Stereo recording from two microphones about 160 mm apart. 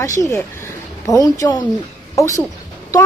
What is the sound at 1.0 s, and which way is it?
A woman's voice, 20° left (ahead or behind).